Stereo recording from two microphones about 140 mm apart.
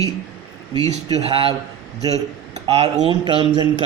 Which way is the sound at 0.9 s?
50° right (ahead or behind).